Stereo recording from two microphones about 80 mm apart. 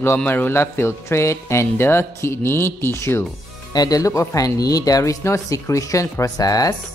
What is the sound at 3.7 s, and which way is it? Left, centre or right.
Speech, left.